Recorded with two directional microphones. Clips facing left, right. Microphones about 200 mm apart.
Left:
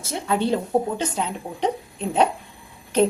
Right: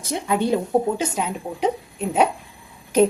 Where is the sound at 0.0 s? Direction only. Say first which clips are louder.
Right 1 dB; 15° right (ahead or behind).